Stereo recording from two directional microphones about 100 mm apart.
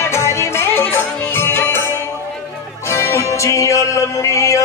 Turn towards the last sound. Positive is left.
turn(degrees=30)  # may be behind; listen again after turning